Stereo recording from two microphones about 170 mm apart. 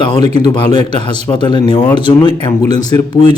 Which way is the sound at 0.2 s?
25° left (ahead or behind).